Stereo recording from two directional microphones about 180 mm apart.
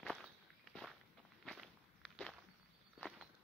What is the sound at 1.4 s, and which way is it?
Walk, centre (ahead or behind).